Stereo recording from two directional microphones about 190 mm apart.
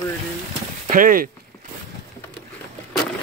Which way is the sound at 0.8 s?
45° right (ahead or behind).